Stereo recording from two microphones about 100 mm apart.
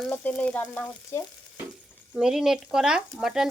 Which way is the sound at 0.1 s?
15° left (ahead or behind).